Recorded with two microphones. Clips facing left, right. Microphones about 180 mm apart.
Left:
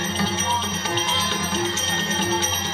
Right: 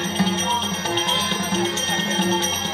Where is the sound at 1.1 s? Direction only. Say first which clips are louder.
Right 2 dB; 60° right (ahead or behind).